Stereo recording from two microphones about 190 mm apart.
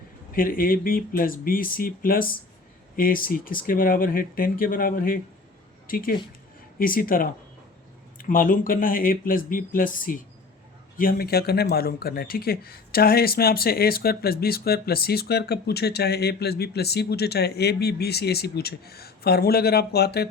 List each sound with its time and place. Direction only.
0.3 s speech: 50° left (ahead or behind)